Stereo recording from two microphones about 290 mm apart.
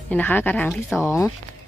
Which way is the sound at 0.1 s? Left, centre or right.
Centre.